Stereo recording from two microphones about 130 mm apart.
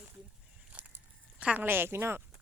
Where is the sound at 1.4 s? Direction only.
10° right (ahead or behind).